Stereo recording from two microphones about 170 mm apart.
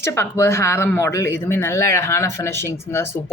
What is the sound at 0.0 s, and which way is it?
Speech, 15° left (ahead or behind).